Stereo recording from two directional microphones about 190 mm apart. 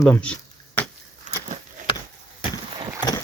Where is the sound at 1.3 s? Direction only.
40° right (ahead or behind).